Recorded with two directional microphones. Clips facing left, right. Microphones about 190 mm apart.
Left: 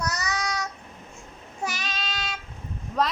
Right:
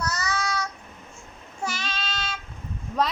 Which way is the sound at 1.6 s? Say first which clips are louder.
Right 1 dB; 15° left (ahead or behind).